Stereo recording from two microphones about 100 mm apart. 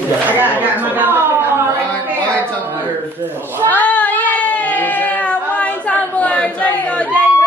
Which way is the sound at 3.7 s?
15° left (ahead or behind).